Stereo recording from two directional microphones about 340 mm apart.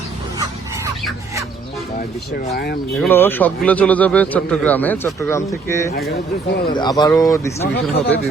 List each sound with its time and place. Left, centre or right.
3.0 s a man's voice: centre
5.9 s speech: left
6.7 s speech: centre
7.7 s speech: left